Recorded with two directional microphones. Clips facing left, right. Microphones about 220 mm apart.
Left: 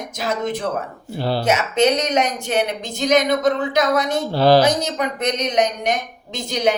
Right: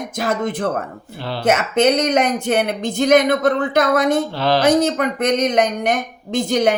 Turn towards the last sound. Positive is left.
turn(degrees=-50)  # may be behind; listen again after turning